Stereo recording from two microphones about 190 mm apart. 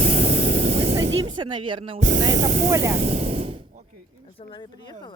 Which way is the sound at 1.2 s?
25° right (ahead or behind).